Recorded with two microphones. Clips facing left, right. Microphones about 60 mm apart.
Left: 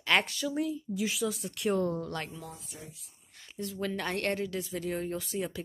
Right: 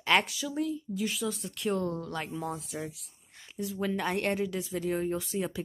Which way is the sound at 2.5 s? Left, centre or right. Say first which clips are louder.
Right 10 dB; right.